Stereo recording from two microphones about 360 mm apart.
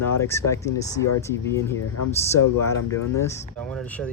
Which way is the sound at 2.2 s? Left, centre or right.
Centre.